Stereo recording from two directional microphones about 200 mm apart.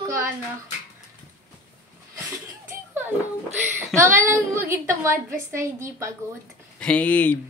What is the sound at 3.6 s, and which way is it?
A woman's voice, 10° right (ahead or behind).